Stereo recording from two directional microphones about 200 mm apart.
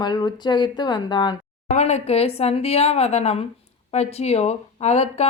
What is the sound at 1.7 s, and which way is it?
Speech, 35° left (ahead or behind).